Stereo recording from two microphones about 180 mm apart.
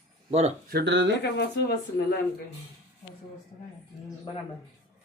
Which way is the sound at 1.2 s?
65° left (ahead or behind).